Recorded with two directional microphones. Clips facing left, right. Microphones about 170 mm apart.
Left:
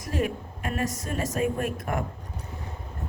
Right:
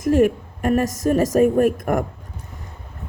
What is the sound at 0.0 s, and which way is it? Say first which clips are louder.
Speech: right 12 dB; 50° right (ahead or behind).